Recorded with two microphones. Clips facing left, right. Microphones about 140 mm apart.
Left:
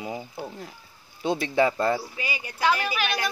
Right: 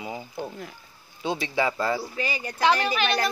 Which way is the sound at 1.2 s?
55° left (ahead or behind).